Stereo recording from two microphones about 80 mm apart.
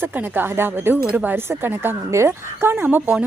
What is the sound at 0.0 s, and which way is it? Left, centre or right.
Speech, right.